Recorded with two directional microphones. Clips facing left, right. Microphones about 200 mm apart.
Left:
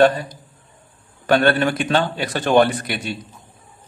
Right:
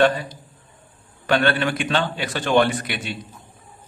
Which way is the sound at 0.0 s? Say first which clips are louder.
Left 3 dB; 40° left (ahead or behind).